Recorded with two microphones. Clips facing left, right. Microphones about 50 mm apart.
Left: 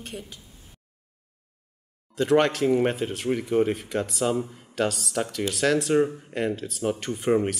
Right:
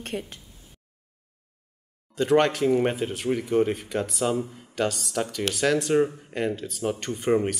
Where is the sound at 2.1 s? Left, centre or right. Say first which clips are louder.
Even; centre.